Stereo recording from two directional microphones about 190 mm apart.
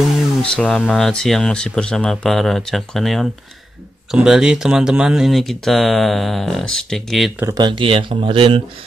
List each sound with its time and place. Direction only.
0.4 s speech: 5° left (ahead or behind)
7.3 s speech: 20° right (ahead or behind)